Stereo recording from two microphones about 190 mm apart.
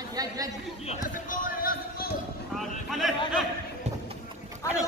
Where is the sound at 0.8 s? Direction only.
45° left (ahead or behind).